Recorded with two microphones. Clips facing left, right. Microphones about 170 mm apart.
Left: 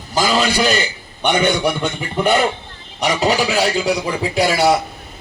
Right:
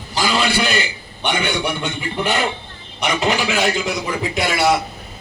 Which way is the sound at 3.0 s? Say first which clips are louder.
Left 3 dB; 35° left (ahead or behind).